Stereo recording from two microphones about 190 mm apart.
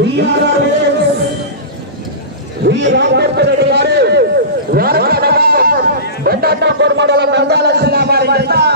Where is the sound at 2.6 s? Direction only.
75° right (ahead or behind).